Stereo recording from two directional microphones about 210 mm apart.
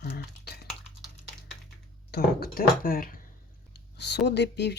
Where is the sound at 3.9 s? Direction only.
55° left (ahead or behind).